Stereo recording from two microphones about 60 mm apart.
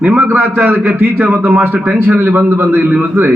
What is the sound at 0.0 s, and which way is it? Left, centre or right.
A man's voice, right.